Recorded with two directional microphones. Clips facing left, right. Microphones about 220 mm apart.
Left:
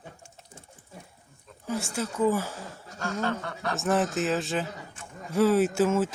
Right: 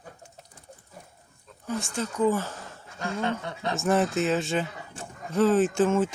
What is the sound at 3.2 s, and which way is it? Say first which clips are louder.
Speech: right 1 dB; 20° right (ahead or behind).